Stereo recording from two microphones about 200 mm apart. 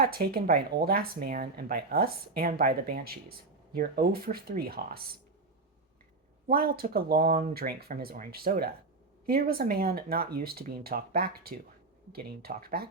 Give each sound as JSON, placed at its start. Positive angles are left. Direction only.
{"t": 0.0, "sound": "speech", "side_deg": -50}
{"t": 6.5, "sound": "speech", "side_deg": -50}